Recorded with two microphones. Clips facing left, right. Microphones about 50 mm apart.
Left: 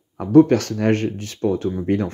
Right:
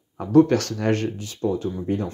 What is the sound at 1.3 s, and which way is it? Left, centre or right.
Speech, left.